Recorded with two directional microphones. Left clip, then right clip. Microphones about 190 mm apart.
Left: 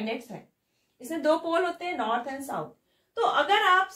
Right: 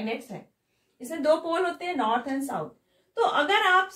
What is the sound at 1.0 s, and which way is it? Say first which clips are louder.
Speech: right 1 dB; 25° left (ahead or behind).